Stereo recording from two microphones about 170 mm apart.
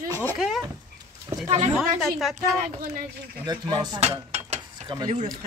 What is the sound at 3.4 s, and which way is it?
Speech, 25° right (ahead or behind).